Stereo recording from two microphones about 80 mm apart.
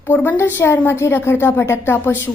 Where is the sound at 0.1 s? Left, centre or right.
Left.